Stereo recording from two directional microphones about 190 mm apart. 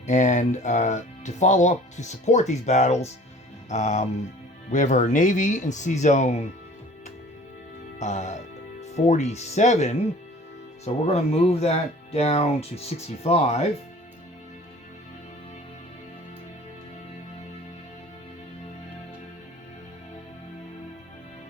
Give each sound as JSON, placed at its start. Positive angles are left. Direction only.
{"t": 0.1, "sound": "speech", "side_deg": 40}
{"t": 7.9, "sound": "speech", "side_deg": 40}